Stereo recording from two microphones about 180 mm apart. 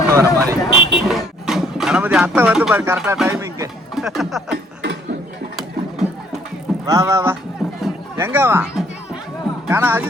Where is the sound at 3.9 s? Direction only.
Centre (ahead or behind).